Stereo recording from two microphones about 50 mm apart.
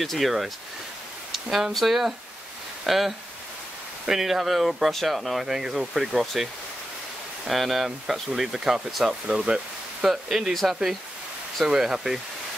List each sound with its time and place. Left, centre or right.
0.0 s speech: centre